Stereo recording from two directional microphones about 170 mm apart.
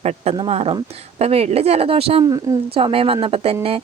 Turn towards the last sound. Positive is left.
turn(degrees=-35)  # may be behind; listen again after turning